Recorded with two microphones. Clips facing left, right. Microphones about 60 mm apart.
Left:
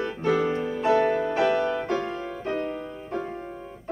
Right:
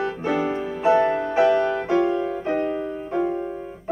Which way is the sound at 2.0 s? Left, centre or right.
Right.